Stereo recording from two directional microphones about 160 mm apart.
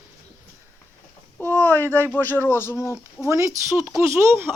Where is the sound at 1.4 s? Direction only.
10° left (ahead or behind).